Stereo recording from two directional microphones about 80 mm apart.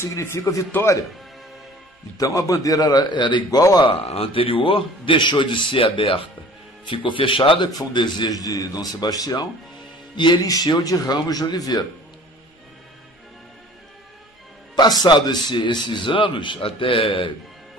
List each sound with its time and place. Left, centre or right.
0.0 s a man's voice: left
2.1 s speech: left
3.4 s speech: left
3.8 s a man's voice: left
8.3 s speech: left
14.8 s a man's voice: left